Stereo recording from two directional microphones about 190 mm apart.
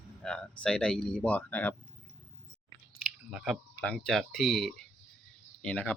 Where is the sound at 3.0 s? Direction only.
Centre (ahead or behind).